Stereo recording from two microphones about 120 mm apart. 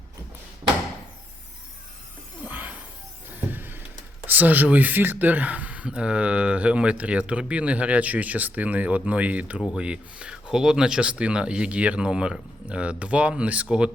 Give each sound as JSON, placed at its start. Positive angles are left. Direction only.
{"t": 2.4, "sound": "shatter", "side_deg": -15}
{"t": 3.2, "sound": "a sound", "side_deg": -15}
{"t": 4.3, "sound": "speech", "side_deg": -15}